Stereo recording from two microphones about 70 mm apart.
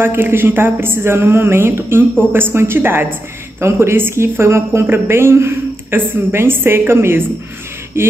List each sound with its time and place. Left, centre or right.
0.0 s a woman's voice: right